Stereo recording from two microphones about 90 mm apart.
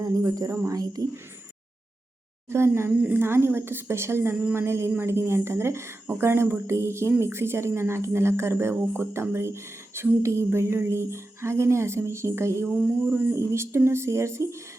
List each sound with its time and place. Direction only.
0.0 s speech: 40° right (ahead or behind)
2.5 s speech: 30° right (ahead or behind)
12.6 s speech: 10° right (ahead or behind)
13.1 s speech: 25° right (ahead or behind)